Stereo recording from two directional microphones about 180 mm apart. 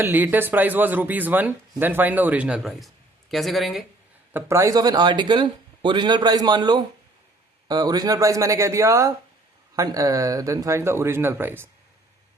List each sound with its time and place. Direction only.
0.0 s speech: 10° right (ahead or behind)
4.3 s speech: 15° right (ahead or behind)